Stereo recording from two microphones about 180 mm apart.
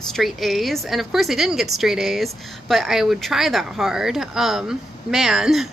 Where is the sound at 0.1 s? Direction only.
Centre (ahead or behind).